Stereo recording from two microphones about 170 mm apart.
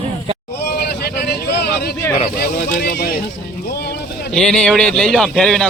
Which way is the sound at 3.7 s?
70° left (ahead or behind).